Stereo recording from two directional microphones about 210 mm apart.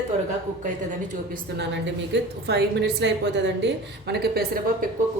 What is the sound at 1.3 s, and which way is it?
A woman's voice, 55° right (ahead or behind).